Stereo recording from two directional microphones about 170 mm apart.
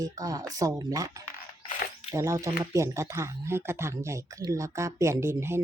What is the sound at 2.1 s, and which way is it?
Speech, 20° right (ahead or behind).